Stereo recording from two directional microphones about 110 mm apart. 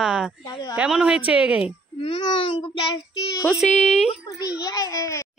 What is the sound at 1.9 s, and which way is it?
Speech, 55° left (ahead or behind).